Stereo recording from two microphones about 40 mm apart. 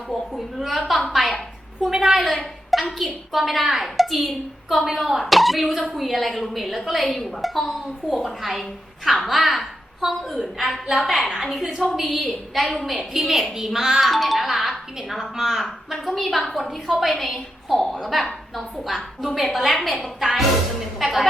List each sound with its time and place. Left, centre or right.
0.1 s a woman's voice: centre
1.9 s a child's voice: centre
2.1 s a sound: centre
3.3 s a woman's voice: centre
13.1 s a child's voice: centre
15.9 s a woman's voice: centre